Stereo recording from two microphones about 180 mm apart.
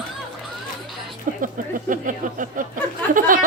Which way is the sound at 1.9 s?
50° right (ahead or behind).